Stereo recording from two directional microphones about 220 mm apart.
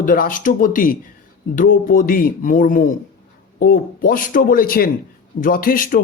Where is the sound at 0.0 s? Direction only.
40° left (ahead or behind).